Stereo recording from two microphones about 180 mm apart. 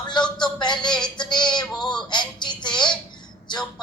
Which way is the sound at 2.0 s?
25° left (ahead or behind).